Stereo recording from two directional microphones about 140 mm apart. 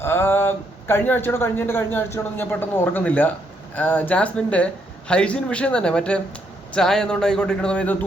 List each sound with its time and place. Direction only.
0.0 s speech: 15° left (ahead or behind)